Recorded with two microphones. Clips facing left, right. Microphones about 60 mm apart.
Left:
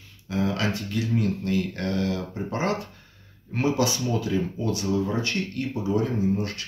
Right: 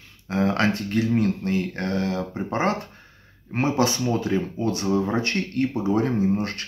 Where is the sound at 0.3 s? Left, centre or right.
Right.